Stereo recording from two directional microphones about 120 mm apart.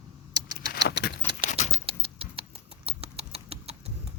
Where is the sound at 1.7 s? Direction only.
50° right (ahead or behind).